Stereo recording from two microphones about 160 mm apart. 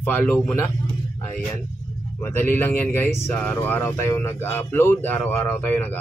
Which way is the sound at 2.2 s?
15° left (ahead or behind).